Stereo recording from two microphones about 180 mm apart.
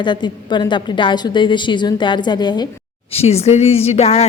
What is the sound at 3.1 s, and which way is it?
A woman's voice, 35° left (ahead or behind).